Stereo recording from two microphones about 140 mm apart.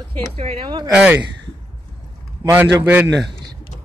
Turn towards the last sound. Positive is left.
turn(degrees=-10)  # may be behind; listen again after turning